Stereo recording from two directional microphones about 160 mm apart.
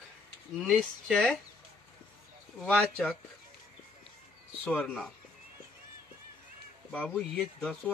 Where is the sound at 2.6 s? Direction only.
5° left (ahead or behind).